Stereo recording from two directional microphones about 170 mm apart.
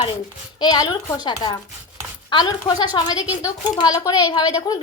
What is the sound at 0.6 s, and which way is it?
A woman's voice, 25° left (ahead or behind).